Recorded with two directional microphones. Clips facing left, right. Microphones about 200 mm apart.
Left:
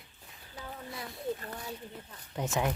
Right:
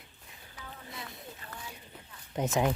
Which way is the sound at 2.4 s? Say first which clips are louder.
Right 3 dB; 20° right (ahead or behind).